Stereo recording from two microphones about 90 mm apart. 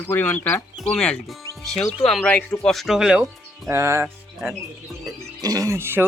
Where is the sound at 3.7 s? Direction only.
30° right (ahead or behind).